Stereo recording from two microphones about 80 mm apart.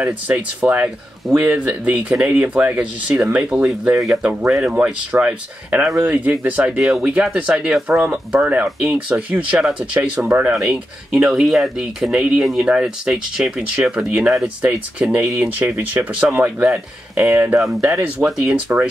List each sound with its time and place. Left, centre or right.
0.0 s speech: centre
6.8 s speech: centre
10.2 s speech: right
10.5 s speech: centre
14.6 s speech: centre